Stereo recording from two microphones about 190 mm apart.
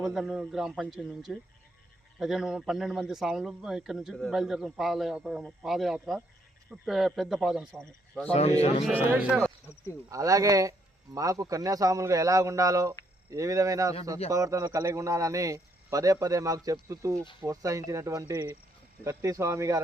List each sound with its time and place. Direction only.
0.0 s a man's voice: centre (ahead or behind)
7.7 s speech: 10° left (ahead or behind)
8.3 s a man's voice: 35° left (ahead or behind)
9.0 s speech: 5° right (ahead or behind)
10.1 s speech: 20° right (ahead or behind)